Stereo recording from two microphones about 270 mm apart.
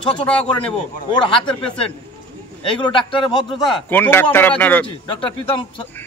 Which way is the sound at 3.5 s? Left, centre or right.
Centre.